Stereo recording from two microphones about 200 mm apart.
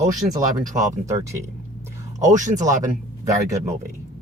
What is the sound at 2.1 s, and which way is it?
Speech, 40° right (ahead or behind).